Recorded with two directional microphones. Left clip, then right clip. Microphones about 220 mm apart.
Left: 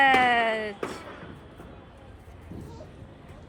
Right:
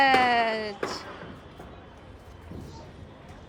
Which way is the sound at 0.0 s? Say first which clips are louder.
Left 1 dB; 10° right (ahead or behind).